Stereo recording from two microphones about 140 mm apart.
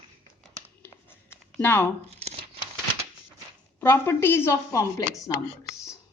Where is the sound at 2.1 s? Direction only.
50° right (ahead or behind).